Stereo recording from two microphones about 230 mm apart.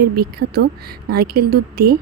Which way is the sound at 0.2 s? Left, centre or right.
Right.